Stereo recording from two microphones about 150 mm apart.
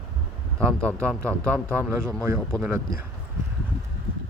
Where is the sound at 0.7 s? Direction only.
5° left (ahead or behind).